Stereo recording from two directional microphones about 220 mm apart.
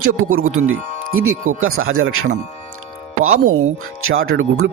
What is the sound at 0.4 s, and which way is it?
Speech, 65° right (ahead or behind).